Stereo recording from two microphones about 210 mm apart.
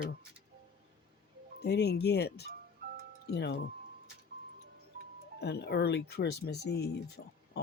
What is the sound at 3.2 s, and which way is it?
Speech, 55° left (ahead or behind).